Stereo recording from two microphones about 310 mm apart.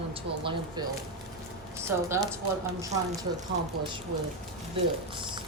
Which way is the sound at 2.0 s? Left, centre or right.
Centre.